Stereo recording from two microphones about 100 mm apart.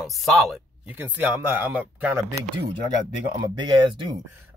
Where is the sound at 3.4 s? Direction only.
50° right (ahead or behind).